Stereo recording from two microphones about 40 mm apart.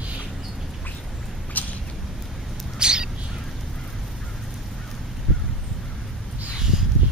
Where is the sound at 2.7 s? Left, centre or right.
Right.